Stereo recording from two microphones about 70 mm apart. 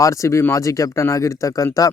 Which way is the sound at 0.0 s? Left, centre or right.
Left.